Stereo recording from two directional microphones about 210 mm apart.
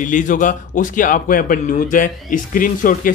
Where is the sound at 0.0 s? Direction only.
40° left (ahead or behind).